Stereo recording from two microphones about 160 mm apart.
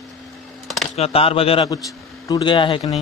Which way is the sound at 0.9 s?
40° left (ahead or behind).